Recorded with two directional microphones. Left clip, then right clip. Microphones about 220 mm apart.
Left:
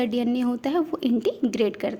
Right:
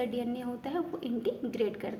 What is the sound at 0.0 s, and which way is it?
A woman's voice, 50° left (ahead or behind).